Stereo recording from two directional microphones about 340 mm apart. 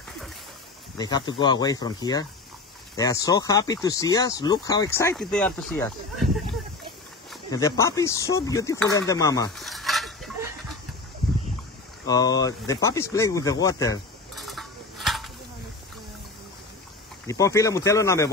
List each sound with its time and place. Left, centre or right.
0.9 s speech: centre
7.5 s speech: centre
12.1 s speech: centre
17.3 s speech: centre